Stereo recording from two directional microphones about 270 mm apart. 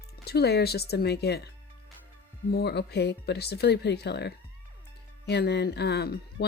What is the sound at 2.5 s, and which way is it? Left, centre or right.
Speech, left.